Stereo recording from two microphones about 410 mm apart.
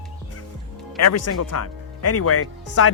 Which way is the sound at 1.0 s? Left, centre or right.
Left.